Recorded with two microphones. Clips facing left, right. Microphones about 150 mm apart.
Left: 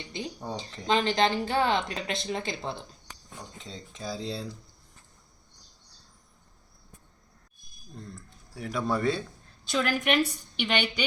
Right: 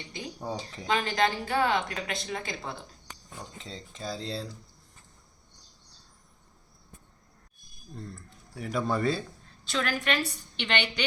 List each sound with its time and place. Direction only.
0.4 s speech: 10° right (ahead or behind)
0.9 s speech: 25° left (ahead or behind)
3.6 s speech: centre (ahead or behind)
8.1 s speech: centre (ahead or behind)
9.6 s a woman's voice: 15° left (ahead or behind)